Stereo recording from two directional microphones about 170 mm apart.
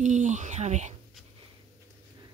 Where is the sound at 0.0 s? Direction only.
45° right (ahead or behind).